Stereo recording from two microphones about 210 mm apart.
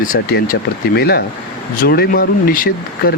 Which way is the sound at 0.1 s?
50° left (ahead or behind).